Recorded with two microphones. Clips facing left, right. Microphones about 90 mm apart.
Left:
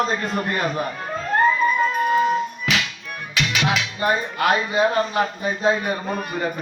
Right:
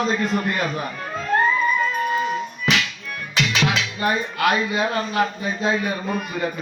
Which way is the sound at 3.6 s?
25° left (ahead or behind).